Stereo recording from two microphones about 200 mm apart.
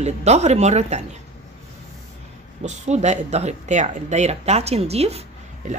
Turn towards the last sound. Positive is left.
turn(degrees=-40)  # may be behind; listen again after turning